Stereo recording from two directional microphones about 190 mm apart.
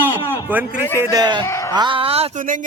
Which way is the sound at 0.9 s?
20° right (ahead or behind).